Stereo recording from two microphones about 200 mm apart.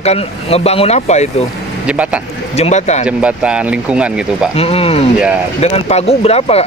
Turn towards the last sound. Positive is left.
turn(degrees=30)  # may be behind; listen again after turning